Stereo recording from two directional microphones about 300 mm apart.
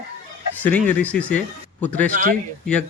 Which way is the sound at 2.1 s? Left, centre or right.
Right.